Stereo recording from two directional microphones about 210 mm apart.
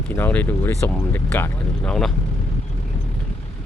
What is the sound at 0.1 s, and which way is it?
Speech, 10° left (ahead or behind).